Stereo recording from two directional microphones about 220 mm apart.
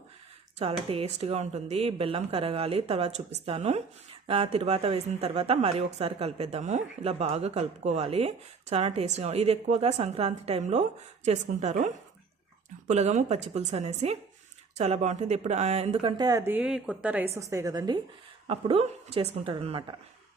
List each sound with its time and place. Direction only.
0.6 s a woman's voice: 25° right (ahead or behind)
12.9 s a woman's voice: 30° right (ahead or behind)